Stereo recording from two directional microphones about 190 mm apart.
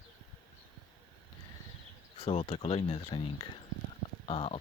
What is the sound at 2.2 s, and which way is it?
Speech, 30° left (ahead or behind).